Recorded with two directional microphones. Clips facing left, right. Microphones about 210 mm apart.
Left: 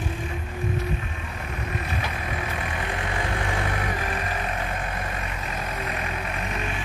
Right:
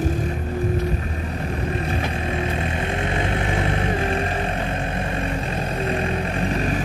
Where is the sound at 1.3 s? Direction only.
35° right (ahead or behind).